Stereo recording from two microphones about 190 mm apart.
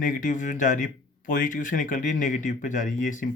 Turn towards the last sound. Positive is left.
turn(degrees=40)  # may be behind; listen again after turning